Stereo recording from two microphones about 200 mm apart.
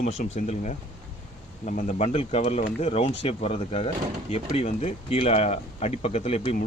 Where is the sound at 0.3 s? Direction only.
35° left (ahead or behind).